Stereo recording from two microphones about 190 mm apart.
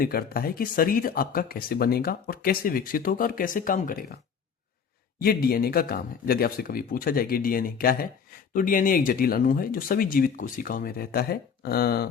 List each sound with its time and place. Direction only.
0.0 s speech: 50° left (ahead or behind)
5.2 s speech: 50° left (ahead or behind)